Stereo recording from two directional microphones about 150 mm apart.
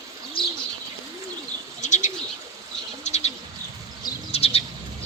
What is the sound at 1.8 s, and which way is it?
Bird, 55° left (ahead or behind).